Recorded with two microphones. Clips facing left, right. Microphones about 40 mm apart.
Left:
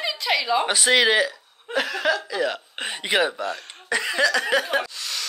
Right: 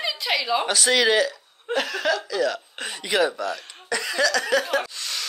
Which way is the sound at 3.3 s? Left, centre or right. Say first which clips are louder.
Even; centre.